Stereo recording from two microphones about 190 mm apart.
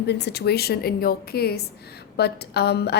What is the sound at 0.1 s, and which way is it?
A woman's voice, 60° left (ahead or behind).